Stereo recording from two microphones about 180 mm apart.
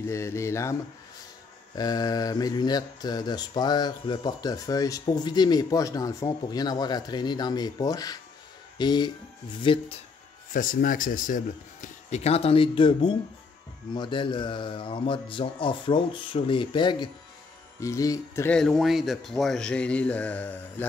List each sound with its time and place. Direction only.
0.0 s speech: 15° left (ahead or behind)
1.8 s mantra: 20° left (ahead or behind)
8.7 s speech: 25° left (ahead or behind)
9.6 s mantra: 30° left (ahead or behind)
10.5 s speech: 50° left (ahead or behind); by 13.2 s 30° left (ahead or behind)
13.9 s mantra: 25° left (ahead or behind)
17.7 s speech: 15° left (ahead or behind)
18.6 s speech: centre (ahead or behind)